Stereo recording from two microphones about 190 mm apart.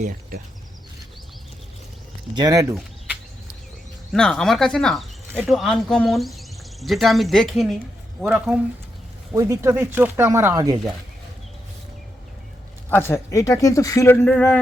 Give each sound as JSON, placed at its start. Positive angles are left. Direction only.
{"t": 2.3, "sound": "speech", "side_deg": -20}
{"t": 4.1, "sound": "speech", "side_deg": 5}
{"t": 9.3, "sound": "speech", "side_deg": -15}
{"t": 12.9, "sound": "speech", "side_deg": 10}